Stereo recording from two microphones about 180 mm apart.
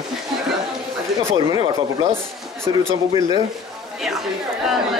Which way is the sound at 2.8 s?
20° right (ahead or behind).